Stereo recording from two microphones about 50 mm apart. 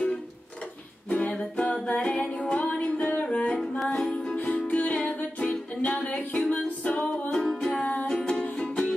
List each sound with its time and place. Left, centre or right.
1.1 s music: centre
4.6 s music: left
7.2 s music: centre
7.7 s music: left
8.3 s music: centre